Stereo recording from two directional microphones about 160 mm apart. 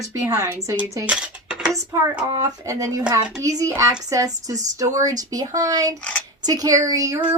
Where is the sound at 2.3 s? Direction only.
20° right (ahead or behind).